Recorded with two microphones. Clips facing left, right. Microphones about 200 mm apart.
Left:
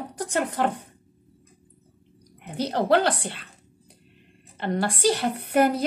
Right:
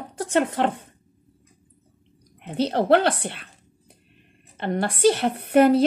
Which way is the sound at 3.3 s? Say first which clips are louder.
Right 2 dB; 20° right (ahead or behind).